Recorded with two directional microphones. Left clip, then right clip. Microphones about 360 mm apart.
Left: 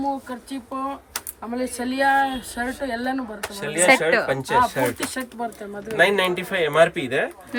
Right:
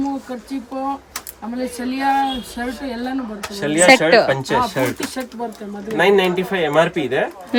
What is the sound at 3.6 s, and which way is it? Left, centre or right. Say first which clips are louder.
Speech: right 5 dB; centre.